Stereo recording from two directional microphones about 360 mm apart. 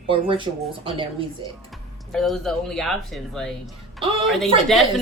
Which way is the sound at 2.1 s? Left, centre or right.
Centre.